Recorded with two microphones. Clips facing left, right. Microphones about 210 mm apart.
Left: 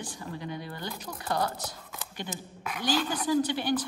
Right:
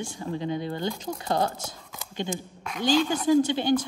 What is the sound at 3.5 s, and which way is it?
Speech, 20° right (ahead or behind).